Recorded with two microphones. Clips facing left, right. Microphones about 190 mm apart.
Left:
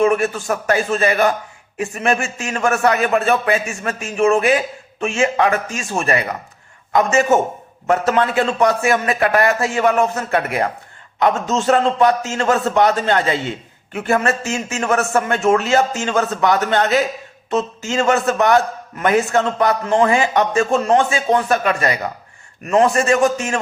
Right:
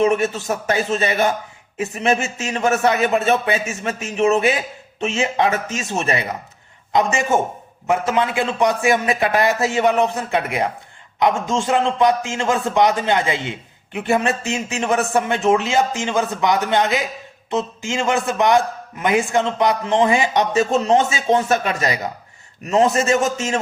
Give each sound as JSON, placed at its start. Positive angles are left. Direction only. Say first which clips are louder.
{"t": 0.0, "sound": "a man's voice", "louder": "left 1 dB", "side_deg": -20}